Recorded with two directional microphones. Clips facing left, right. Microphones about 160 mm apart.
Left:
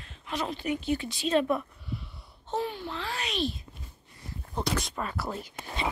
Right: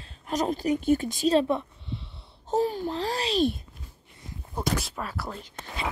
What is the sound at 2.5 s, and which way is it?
Speech, 40° right (ahead or behind).